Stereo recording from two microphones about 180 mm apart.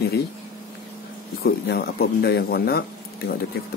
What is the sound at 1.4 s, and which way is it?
Mantra, 60° left (ahead or behind).